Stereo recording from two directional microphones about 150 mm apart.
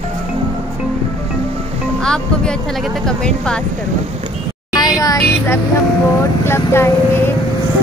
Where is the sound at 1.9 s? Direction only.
5° left (ahead or behind).